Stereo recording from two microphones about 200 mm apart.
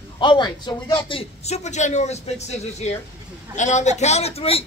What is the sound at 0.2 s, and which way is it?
A man's voice, 20° left (ahead or behind).